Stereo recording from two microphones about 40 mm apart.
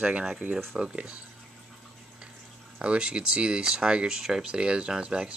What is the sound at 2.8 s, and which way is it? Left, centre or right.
Speech, right.